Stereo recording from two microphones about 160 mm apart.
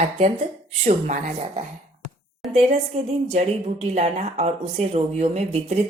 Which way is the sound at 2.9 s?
40° right (ahead or behind).